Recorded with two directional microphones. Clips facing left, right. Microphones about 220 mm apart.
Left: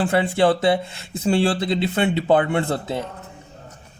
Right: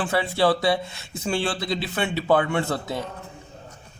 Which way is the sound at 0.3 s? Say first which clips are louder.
Left 2 dB; 20° left (ahead or behind).